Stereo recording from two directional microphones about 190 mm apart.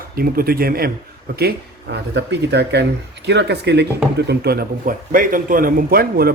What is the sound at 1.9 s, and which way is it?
A man's voice, 65° right (ahead or behind).